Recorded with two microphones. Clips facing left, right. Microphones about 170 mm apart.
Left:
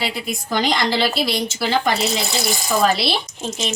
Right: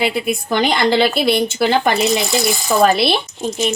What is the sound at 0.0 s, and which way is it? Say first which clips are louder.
A woman's voice: right 7 dB; 55° right (ahead or behind).